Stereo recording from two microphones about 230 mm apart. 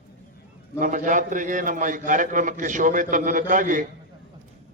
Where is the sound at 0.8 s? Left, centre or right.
Right.